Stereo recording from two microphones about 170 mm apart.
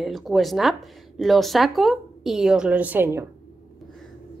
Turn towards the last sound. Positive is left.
turn(degrees=-10)  # may be behind; listen again after turning